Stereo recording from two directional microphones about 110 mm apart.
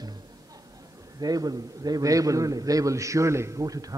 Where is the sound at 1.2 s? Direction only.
35° right (ahead or behind).